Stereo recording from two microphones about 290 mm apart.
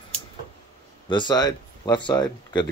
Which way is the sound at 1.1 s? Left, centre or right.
Centre.